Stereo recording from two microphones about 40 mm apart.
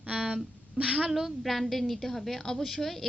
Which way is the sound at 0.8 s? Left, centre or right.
Right.